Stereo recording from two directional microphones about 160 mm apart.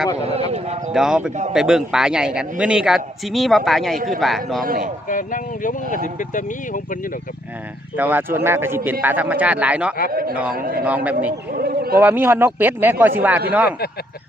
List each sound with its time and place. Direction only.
0.2 s speech: 40° right (ahead or behind)
0.9 s a man's voice: 5° right (ahead or behind)
4.6 s a man's voice: 60° right (ahead or behind)
5.0 s speech: 55° left (ahead or behind)
7.9 s a man's voice: 10° right (ahead or behind)
10.1 s a man's voice: 65° right (ahead or behind)
10.8 s a man's voice: 10° right (ahead or behind)
11.5 s a sound: 70° right (ahead or behind)
11.9 s a man's voice: 10° right (ahead or behind)
13.7 s speech: 75° left (ahead or behind)